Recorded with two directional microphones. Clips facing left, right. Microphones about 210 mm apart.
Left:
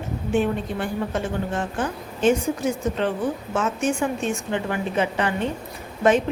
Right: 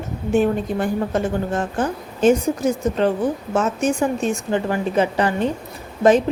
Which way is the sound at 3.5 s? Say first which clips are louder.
Right 3 dB; 40° right (ahead or behind).